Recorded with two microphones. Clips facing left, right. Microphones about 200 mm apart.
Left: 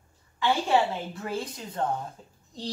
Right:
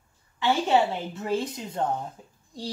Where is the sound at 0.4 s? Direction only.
25° right (ahead or behind).